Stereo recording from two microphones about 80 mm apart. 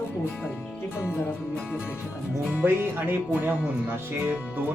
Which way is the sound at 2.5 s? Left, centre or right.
Right.